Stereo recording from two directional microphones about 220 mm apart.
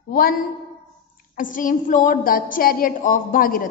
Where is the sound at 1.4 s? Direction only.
35° left (ahead or behind).